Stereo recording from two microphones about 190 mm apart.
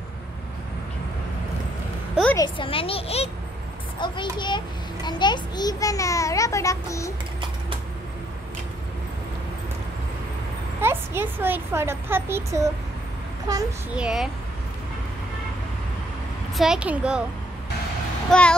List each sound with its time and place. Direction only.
2.3 s a child's voice: 25° left (ahead or behind)
10.8 s a child's voice: 10° right (ahead or behind)
13.9 s a woman's voice: 5° right (ahead or behind)
16.5 s a woman's voice: 5° right (ahead or behind)